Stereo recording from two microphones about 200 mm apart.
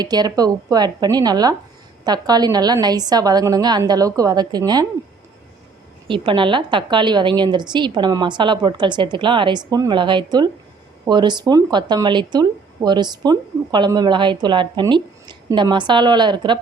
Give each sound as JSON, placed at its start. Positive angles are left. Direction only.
{"t": 0.0, "sound": "speech", "side_deg": -20}
{"t": 6.1, "sound": "speech", "side_deg": -25}